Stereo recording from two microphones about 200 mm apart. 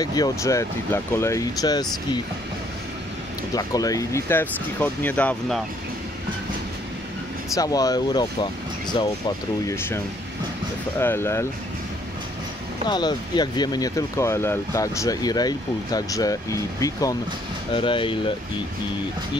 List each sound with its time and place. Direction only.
0.0 s speech: 20° left (ahead or behind)
3.5 s speech: 20° left (ahead or behind)
7.5 s speech: 20° left (ahead or behind)
11.0 s speech: 10° left (ahead or behind)
12.8 s speech: 20° left (ahead or behind)